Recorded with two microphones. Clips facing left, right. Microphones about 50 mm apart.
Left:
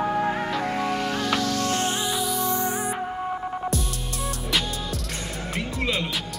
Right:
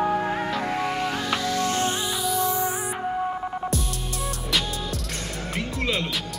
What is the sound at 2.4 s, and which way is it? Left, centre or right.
Music, centre.